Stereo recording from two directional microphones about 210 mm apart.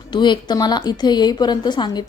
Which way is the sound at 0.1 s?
20° left (ahead or behind).